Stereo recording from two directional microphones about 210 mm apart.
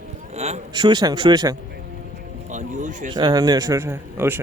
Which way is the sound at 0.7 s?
20° right (ahead or behind).